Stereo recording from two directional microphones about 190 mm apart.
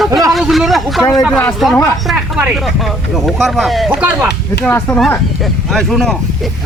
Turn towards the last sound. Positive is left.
turn(degrees=5)  # may be behind; listen again after turning